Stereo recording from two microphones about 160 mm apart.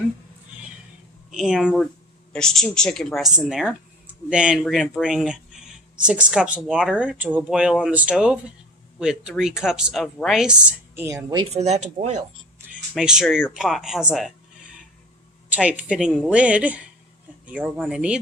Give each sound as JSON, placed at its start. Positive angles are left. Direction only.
{"t": 1.3, "sound": "speech", "side_deg": -5}
{"t": 11.0, "sound": "speech", "side_deg": -20}
{"t": 11.5, "sound": "speech", "side_deg": -45}
{"t": 13.0, "sound": "speech", "side_deg": -5}
{"t": 15.4, "sound": "speech", "side_deg": -10}
{"t": 17.4, "sound": "a sound", "side_deg": -10}
{"t": 17.7, "sound": "speech", "side_deg": -5}